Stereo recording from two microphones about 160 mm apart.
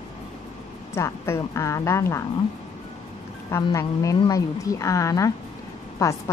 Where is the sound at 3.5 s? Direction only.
20° left (ahead or behind).